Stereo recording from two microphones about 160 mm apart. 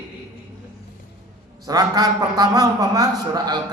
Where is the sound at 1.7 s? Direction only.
25° right (ahead or behind).